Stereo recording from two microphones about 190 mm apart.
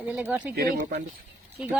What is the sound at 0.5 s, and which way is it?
Speech, 50° right (ahead or behind).